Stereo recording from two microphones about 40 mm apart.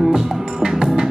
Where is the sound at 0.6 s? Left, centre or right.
Centre.